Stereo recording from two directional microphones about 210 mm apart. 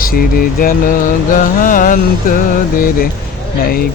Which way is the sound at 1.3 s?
40° left (ahead or behind).